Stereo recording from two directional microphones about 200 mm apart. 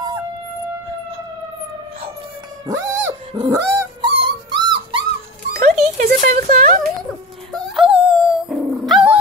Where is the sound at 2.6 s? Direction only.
15° right (ahead or behind).